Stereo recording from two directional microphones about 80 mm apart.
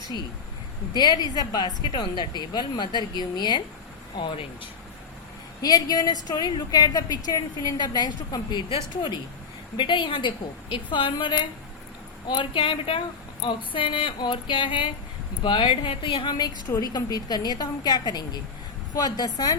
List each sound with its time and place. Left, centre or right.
0.9 s a woman's voice: left
5.6 s a woman's voice: left
9.7 s a woman's voice: left
12.3 s a sound: left
15.4 s a woman's voice: left